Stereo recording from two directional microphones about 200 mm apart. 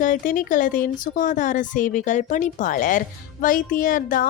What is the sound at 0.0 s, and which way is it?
A woman's voice, 40° left (ahead or behind).